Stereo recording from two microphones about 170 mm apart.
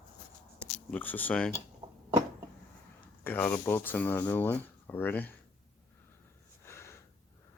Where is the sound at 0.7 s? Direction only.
5° left (ahead or behind).